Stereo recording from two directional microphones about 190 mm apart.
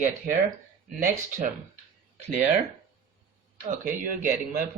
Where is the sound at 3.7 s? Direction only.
45° right (ahead or behind).